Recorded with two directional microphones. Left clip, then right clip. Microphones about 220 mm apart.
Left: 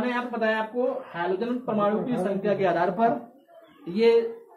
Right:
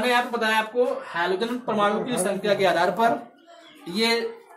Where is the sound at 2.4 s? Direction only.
10° left (ahead or behind).